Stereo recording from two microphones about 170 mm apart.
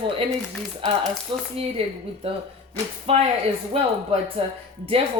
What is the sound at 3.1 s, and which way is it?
Speech, 35° right (ahead or behind).